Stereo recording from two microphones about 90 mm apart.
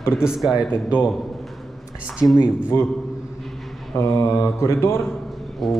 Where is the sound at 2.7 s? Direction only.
35° left (ahead or behind).